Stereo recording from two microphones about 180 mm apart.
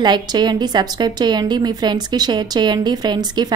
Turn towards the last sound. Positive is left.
turn(degrees=-25)  # may be behind; listen again after turning